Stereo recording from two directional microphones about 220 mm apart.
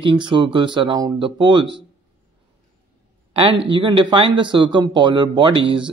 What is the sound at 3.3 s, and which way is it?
Speech, 25° right (ahead or behind).